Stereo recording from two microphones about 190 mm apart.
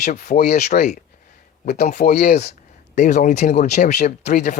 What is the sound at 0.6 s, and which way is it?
Speech, 40° left (ahead or behind).